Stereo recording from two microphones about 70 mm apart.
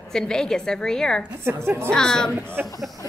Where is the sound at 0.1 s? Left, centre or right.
Centre.